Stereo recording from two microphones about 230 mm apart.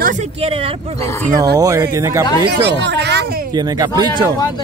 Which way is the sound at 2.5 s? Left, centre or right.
Right.